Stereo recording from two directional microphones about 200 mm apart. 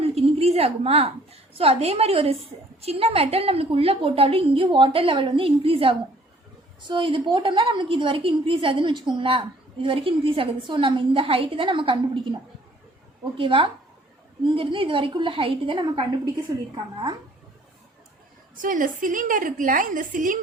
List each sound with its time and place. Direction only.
0.0 s a woman's voice: 30° right (ahead or behind)
13.3 s a woman's voice: 25° right (ahead or behind)
18.5 s a woman's voice: 40° right (ahead or behind)